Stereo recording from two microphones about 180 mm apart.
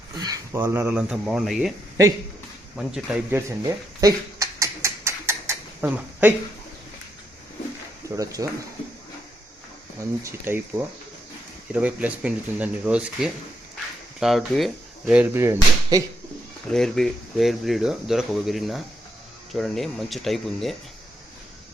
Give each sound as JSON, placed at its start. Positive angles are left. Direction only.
{"t": 0.2, "sound": "speech", "side_deg": -20}
{"t": 2.7, "sound": "a sound", "side_deg": -5}
{"t": 8.0, "sound": "speech", "side_deg": -20}
{"t": 10.0, "sound": "speech", "side_deg": -15}
{"t": 16.7, "sound": "speech", "side_deg": 0}